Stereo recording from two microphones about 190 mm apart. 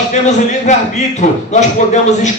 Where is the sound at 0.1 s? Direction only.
40° left (ahead or behind).